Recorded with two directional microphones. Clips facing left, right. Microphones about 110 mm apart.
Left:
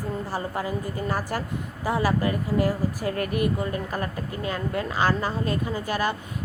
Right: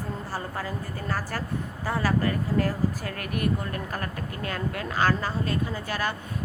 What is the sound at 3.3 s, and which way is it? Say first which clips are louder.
Speech: even; 50° right (ahead or behind).